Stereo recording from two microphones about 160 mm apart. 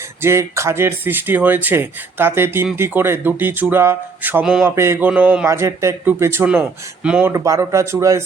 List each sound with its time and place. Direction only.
0.2 s speech: 15° right (ahead or behind)
7.3 s speech: 20° right (ahead or behind)